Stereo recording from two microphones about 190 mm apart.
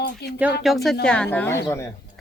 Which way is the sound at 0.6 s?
Centre (ahead or behind).